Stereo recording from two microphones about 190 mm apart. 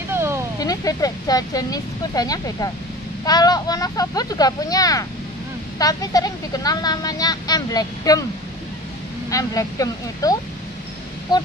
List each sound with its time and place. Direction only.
0.1 s a sound: 15° right (ahead or behind)
0.6 s speech: 20° left (ahead or behind)
9.3 s speech: 20° left (ahead or behind)